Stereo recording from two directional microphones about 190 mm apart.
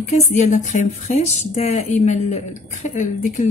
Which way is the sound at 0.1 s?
40° left (ahead or behind).